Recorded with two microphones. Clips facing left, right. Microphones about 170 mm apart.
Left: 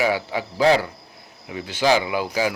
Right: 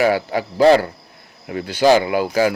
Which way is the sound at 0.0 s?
50° right (ahead or behind).